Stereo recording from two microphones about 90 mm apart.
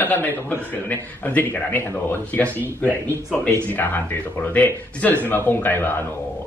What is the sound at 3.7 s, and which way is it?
Speech, 20° left (ahead or behind).